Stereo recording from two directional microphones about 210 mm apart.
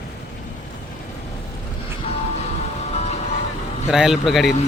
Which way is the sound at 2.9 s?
30° left (ahead or behind).